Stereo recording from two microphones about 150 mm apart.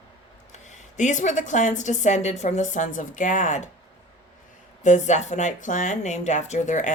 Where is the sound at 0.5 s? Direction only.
50° left (ahead or behind).